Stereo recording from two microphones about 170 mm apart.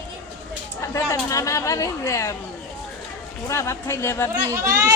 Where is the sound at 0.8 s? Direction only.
20° left (ahead or behind).